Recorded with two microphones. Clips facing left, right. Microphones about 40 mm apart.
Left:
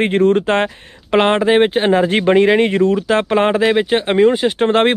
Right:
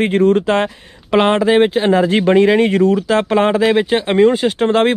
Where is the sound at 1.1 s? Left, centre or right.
Left.